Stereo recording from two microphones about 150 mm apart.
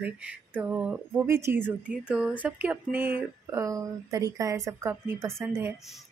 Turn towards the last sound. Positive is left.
turn(degrees=-15)  # may be behind; listen again after turning